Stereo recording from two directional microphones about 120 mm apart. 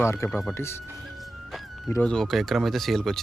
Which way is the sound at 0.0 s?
20° left (ahead or behind).